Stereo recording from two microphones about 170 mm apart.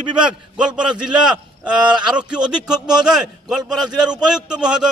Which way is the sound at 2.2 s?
5° right (ahead or behind).